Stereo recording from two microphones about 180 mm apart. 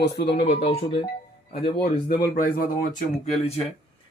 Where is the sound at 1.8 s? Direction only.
55° left (ahead or behind).